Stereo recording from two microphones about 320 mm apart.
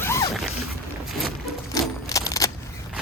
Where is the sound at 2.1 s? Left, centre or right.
Centre.